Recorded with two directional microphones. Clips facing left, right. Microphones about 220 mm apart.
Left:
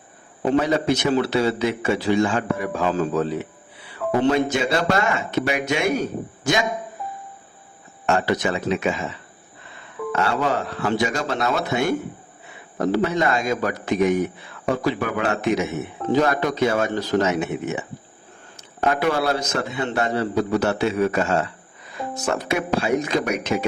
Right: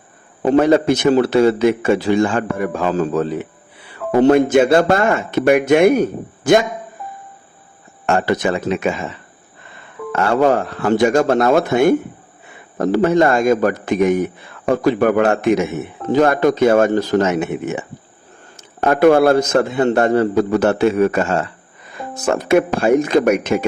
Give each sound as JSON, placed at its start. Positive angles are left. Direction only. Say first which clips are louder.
{"t": 0.5, "sound": "a man's voice", "louder": "right 7 dB", "side_deg": -50}
{"t": 8.0, "sound": "a man's voice", "louder": "right 4 dB", "side_deg": -50}
{"t": 10.1, "sound": "a man's voice", "louder": "right 8 dB", "side_deg": -50}